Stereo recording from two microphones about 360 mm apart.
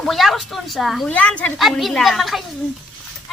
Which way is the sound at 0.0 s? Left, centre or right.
Centre.